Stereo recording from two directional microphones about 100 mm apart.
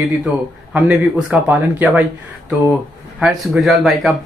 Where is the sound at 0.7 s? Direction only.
15° right (ahead or behind).